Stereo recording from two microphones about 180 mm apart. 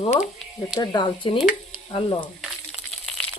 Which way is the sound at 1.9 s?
30° left (ahead or behind).